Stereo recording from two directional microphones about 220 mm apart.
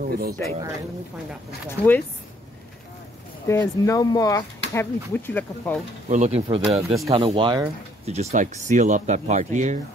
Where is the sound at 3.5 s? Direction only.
15° left (ahead or behind).